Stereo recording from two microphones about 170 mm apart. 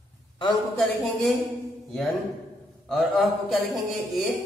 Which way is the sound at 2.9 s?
Centre (ahead or behind).